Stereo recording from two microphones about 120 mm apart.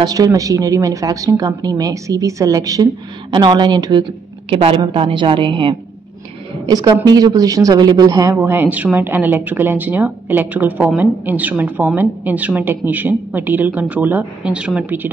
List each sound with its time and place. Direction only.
0.0 s speech: 30° right (ahead or behind)
4.5 s a woman's voice: 50° right (ahead or behind)
6.7 s speech: 30° right (ahead or behind); by 15.0 s 10° right (ahead or behind)